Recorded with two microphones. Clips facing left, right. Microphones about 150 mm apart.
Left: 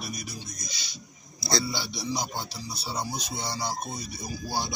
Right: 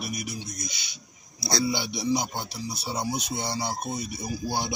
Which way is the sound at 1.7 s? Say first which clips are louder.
Right 5 dB; 15° right (ahead or behind).